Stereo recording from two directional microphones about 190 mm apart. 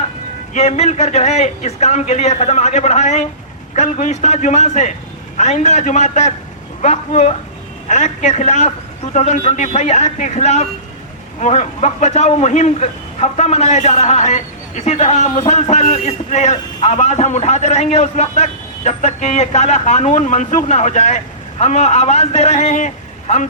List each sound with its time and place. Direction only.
0.5 s a man's voice: 35° left (ahead or behind)